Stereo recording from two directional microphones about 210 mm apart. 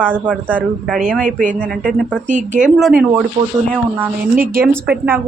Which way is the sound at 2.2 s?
35° right (ahead or behind).